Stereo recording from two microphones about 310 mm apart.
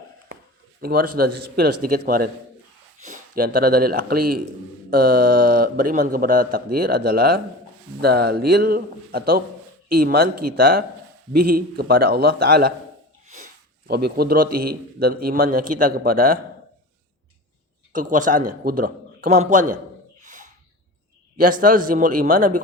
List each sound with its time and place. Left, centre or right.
0.8 s a man's voice: right
17.9 s a man's voice: right
20.2 s a sound: right
21.3 s a man's voice: right